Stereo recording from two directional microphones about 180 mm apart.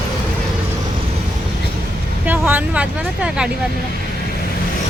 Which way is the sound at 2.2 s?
10° right (ahead or behind).